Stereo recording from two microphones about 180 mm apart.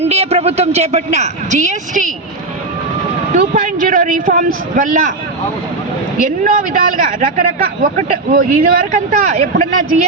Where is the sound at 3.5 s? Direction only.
50° right (ahead or behind).